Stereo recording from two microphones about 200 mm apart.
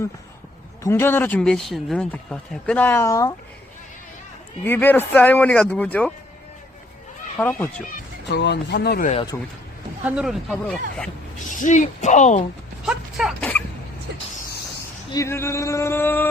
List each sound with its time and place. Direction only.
0.8 s speech: 15° left (ahead or behind)
4.6 s speech: 10° left (ahead or behind)
7.3 s speech: 10° left (ahead or behind)
8.3 s speech: 60° left (ahead or behind)
9.3 s speech: 15° left (ahead or behind)
10.0 s speech: 5° right (ahead or behind)
10.5 s dog: 5° left (ahead or behind)
11.5 s speech: 40° left (ahead or behind)
12.8 s dog: 5° right (ahead or behind)
15.1 s speech: 15° left (ahead or behind)